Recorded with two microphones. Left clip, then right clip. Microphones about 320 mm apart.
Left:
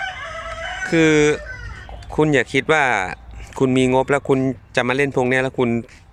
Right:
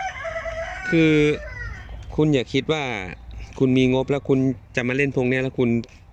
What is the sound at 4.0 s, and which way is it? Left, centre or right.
Speech, left.